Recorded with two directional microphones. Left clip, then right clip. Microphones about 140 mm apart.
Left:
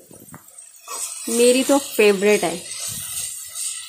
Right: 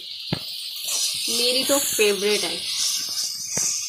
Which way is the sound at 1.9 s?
75° left (ahead or behind).